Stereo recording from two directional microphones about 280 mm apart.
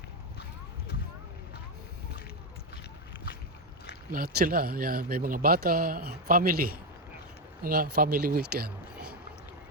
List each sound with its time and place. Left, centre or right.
4.1 s speech: right